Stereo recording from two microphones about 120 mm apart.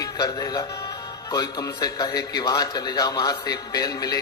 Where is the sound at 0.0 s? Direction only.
30° left (ahead or behind).